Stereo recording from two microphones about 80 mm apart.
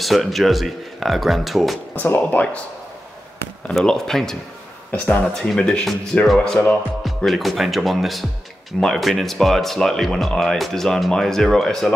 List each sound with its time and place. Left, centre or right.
0.0 s speech: centre
2.0 s speech: left
3.7 s speech: centre
4.9 s speech: centre
5.2 s speech: centre